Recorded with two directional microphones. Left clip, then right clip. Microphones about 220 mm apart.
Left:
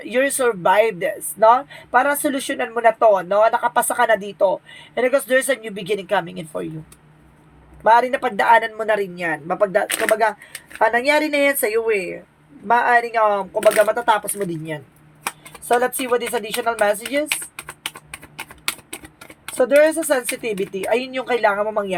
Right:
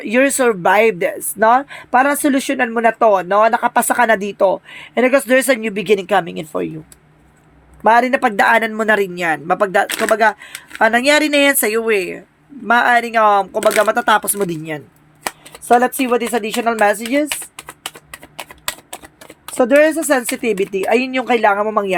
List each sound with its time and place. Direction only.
0.0 s speech: 50° right (ahead or behind)
7.9 s speech: 50° right (ahead or behind)
19.5 s speech: 50° right (ahead or behind)